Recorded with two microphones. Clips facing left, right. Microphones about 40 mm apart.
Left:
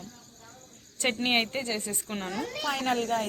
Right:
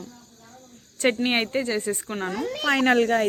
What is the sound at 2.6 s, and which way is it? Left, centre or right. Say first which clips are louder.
Speech: right 9 dB; right.